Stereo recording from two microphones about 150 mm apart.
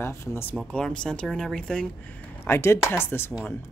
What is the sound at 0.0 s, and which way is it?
Speech, 20° left (ahead or behind).